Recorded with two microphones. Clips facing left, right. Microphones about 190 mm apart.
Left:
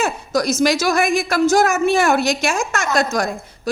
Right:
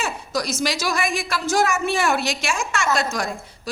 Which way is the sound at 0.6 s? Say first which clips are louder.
Left 8 dB; 45° left (ahead or behind).